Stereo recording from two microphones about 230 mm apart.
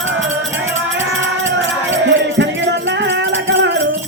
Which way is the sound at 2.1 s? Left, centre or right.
Right.